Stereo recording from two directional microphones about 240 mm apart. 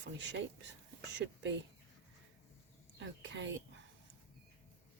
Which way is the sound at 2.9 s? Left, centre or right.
Right.